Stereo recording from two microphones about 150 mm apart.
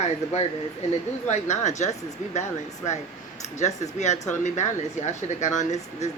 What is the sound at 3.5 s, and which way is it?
Speech, 50° left (ahead or behind).